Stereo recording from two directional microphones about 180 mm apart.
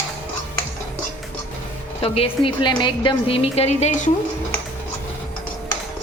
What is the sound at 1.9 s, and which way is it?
A woman's voice, 30° left (ahead or behind).